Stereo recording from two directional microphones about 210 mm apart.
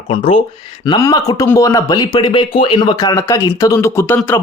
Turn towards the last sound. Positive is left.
turn(degrees=10)  # may be behind; listen again after turning